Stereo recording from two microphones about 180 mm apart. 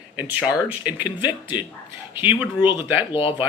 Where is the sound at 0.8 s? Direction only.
10° right (ahead or behind).